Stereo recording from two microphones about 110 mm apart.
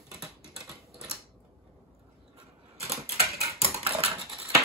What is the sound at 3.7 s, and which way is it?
Dog, 60° right (ahead or behind).